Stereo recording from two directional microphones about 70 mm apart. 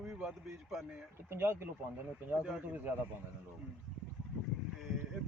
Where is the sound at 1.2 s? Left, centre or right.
Right.